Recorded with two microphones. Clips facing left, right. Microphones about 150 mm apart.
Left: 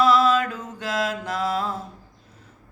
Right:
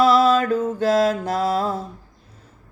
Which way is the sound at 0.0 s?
35° right (ahead or behind).